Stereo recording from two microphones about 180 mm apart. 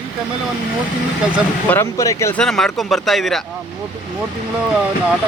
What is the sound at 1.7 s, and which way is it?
Speech, 15° left (ahead or behind).